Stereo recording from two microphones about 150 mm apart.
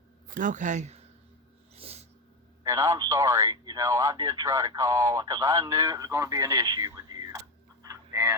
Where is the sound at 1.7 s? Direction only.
40° right (ahead or behind).